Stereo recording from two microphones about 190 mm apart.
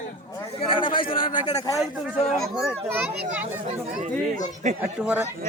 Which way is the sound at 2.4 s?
Centre (ahead or behind).